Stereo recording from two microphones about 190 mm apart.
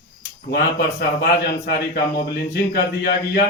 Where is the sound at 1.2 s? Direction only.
55° left (ahead or behind).